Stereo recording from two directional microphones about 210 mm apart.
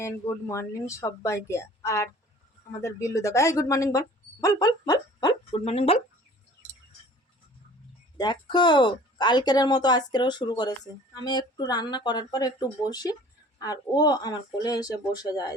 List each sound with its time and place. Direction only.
0.0 s speech: 15° left (ahead or behind)
8.2 s speech: 20° left (ahead or behind)